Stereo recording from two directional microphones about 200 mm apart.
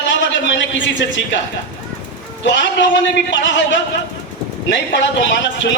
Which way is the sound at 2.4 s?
60° left (ahead or behind).